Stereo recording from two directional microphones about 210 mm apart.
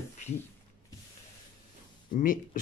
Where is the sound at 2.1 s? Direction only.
40° left (ahead or behind).